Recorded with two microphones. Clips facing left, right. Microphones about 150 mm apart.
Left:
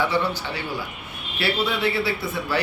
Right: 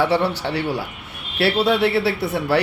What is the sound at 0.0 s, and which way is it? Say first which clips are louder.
Speech: right 4 dB; 75° right (ahead or behind).